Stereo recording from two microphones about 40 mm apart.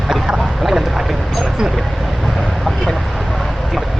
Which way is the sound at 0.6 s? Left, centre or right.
Centre.